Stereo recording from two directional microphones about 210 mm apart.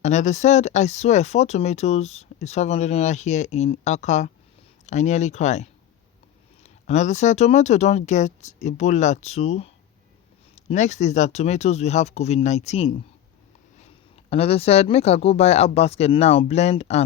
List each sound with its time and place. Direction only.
0.0 s speech: 35° left (ahead or behind)